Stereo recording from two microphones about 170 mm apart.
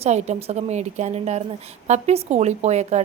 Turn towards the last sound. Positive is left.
turn(degrees=-40)  # may be behind; listen again after turning